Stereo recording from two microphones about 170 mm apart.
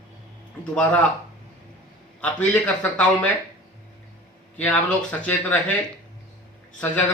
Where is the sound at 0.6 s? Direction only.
5° left (ahead or behind).